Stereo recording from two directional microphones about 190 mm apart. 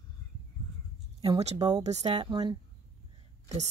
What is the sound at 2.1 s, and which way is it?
Speech, 25° right (ahead or behind).